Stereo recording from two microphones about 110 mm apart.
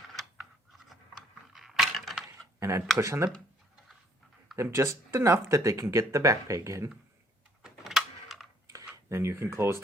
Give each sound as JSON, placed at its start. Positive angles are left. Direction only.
{"t": 0.2, "sound": "a sound", "side_deg": 0}
{"t": 2.6, "sound": "speech", "side_deg": -25}
{"t": 4.5, "sound": "speech", "side_deg": -25}
{"t": 7.6, "sound": "a sound", "side_deg": -5}
{"t": 8.6, "sound": "computer keyboard", "side_deg": -30}
{"t": 9.0, "sound": "speech", "side_deg": -25}